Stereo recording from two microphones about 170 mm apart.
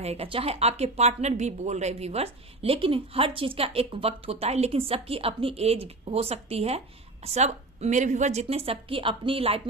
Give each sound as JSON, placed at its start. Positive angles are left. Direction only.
{"t": 0.0, "sound": "speech", "side_deg": -35}